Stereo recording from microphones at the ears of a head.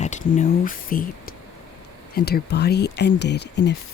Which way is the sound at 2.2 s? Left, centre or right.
Left.